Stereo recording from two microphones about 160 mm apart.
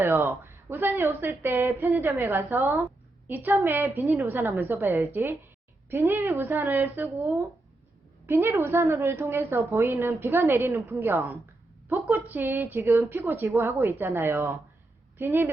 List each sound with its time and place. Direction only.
0.0 s a woman's voice: 15° right (ahead or behind)